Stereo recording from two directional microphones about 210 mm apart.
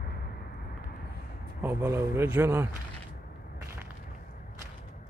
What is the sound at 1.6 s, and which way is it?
A man's voice, 10° right (ahead or behind).